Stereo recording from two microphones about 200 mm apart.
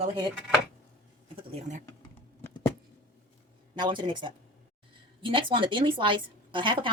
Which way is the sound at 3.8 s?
25° right (ahead or behind).